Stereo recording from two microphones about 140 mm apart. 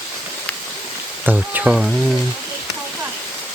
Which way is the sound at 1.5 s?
10° right (ahead or behind).